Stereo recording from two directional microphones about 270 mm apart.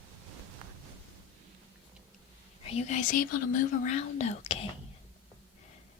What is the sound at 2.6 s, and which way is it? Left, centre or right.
Speech, left.